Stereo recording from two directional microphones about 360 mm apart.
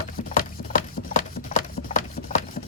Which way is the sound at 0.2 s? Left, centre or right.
Left.